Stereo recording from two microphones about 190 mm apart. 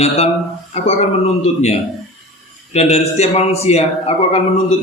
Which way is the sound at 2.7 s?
35° left (ahead or behind).